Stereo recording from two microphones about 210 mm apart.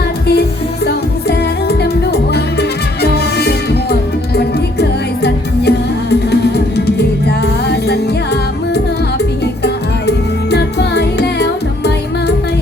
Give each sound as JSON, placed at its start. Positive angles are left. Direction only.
{"t": 0.9, "sound": "music", "side_deg": 50}
{"t": 7.3, "sound": "music", "side_deg": 55}